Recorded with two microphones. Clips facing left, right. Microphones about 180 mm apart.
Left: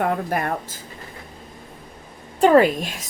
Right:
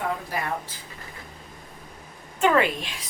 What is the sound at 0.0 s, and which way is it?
Speech, 55° left (ahead or behind).